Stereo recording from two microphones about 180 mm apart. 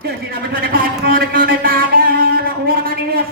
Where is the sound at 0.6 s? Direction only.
55° right (ahead or behind).